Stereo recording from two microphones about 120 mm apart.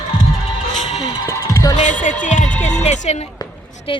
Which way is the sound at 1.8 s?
90° left.